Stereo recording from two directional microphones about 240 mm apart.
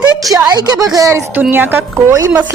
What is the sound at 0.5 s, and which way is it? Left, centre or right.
Speech, centre.